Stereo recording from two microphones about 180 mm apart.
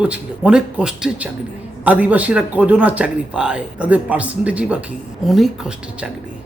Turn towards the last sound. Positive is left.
turn(degrees=0)  # may be behind; listen again after turning